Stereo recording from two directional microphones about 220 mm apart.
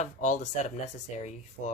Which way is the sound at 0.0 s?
35° left (ahead or behind).